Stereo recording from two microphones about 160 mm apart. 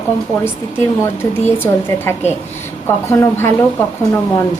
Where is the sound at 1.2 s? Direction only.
15° left (ahead or behind).